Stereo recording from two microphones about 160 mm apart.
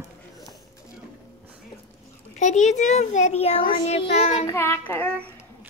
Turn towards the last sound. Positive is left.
turn(degrees=10)  # may be behind; listen again after turning